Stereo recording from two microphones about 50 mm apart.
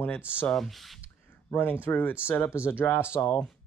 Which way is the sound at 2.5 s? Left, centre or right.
Left.